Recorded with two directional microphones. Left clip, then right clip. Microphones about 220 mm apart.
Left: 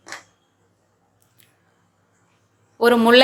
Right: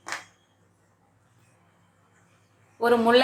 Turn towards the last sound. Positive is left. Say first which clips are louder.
# left 6 dB
turn(degrees=40)  # may be behind; listen again after turning